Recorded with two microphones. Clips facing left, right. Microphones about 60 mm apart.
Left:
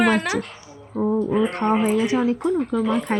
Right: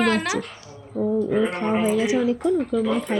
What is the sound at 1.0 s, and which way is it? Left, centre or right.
A woman's voice, left.